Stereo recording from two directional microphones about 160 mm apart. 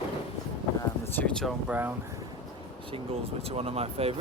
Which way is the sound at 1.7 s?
10° right (ahead or behind).